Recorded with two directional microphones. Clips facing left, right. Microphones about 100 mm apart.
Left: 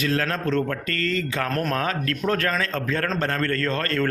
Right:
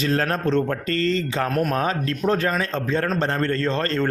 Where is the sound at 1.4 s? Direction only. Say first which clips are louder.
Right 3 dB; 10° right (ahead or behind).